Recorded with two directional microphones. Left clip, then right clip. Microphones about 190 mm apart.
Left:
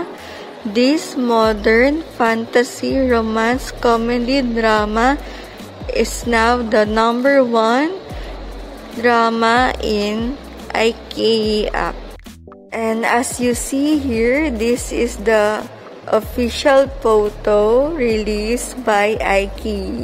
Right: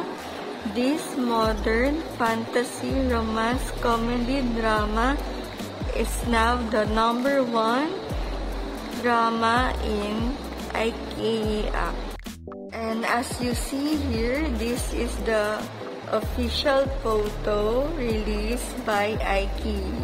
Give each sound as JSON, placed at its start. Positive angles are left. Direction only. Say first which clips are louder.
{"t": 0.7, "sound": "a woman's voice", "louder": "left 10 dB", "side_deg": 35}
{"t": 9.0, "sound": "a woman's voice", "louder": "left 8 dB", "side_deg": 35}